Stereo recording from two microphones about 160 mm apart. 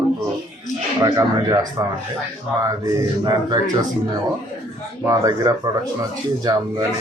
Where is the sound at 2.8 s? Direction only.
25° right (ahead or behind).